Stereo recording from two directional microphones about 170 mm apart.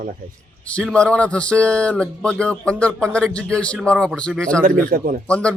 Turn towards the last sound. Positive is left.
turn(degrees=5)  # may be behind; listen again after turning